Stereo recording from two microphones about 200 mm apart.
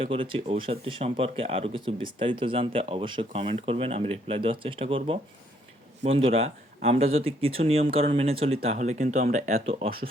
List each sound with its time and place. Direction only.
0.0 s speech: 30° right (ahead or behind)